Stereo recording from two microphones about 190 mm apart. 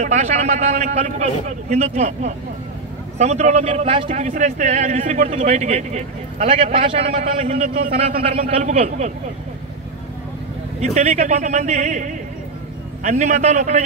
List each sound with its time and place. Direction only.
0.0 s a man's voice: 35° right (ahead or behind)
10.8 s a man's voice: 35° right (ahead or behind)